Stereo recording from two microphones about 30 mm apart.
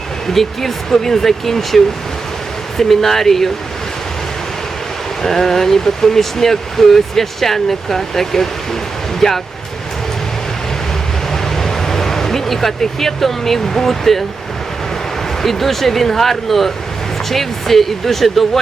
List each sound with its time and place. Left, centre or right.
0.3 s speech: centre
5.2 s speech: centre
11.3 s a sound: centre
12.8 s speech: centre
15.4 s speech: centre